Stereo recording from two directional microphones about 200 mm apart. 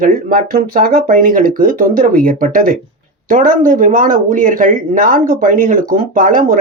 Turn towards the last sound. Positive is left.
turn(degrees=-45)  # may be behind; listen again after turning